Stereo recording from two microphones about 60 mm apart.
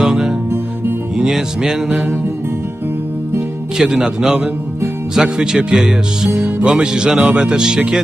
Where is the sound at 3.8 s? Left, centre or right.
Centre.